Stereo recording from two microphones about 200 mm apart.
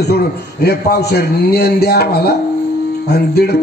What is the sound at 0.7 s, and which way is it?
Speech, 50° left (ahead or behind).